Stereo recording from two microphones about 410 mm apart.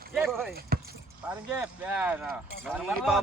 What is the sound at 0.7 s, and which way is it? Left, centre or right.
Vehicle, right.